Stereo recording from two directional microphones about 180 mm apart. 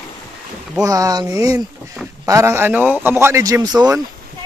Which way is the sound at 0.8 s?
20° right (ahead or behind).